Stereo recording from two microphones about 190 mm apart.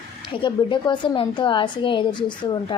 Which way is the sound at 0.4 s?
25° left (ahead or behind).